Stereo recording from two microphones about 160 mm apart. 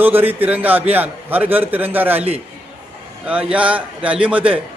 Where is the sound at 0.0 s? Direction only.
10° right (ahead or behind).